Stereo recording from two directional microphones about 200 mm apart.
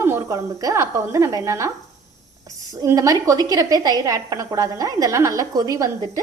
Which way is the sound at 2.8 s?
15° right (ahead or behind).